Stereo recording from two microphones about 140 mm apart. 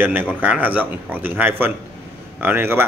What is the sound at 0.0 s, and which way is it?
Speech, 15° right (ahead or behind).